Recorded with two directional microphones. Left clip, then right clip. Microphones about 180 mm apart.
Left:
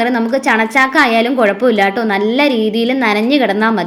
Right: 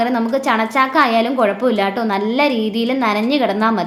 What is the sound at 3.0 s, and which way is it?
Speech, 15° left (ahead or behind).